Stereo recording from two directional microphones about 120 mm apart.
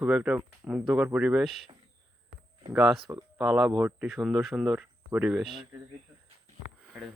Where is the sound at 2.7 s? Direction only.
5° right (ahead or behind).